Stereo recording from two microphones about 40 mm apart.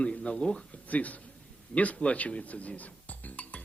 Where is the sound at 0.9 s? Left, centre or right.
Left.